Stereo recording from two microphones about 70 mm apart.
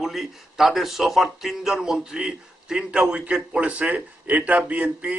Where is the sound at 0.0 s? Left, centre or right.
Centre.